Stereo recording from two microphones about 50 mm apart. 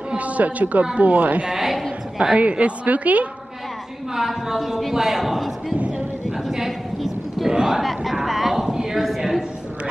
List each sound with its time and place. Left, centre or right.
0.1 s a sound: right
0.9 s a woman's voice: right
1.5 s a woman's voice: centre
2.3 s a woman's voice: right
4.1 s a man's voice: centre
6.3 s a sound: centre